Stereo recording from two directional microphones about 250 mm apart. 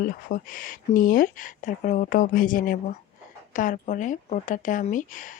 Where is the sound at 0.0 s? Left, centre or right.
Left.